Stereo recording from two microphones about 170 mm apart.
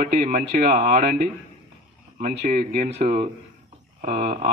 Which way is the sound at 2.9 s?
35° right (ahead or behind).